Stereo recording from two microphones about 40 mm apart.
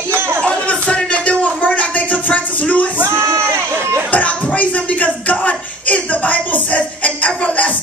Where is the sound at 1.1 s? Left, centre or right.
Left.